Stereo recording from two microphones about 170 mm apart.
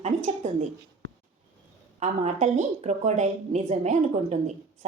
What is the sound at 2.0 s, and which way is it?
A woman's voice, 40° right (ahead or behind).